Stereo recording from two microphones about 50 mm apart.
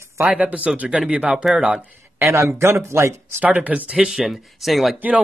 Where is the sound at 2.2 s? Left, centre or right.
Right.